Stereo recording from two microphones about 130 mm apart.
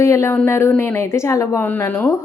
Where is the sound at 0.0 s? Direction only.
20° left (ahead or behind).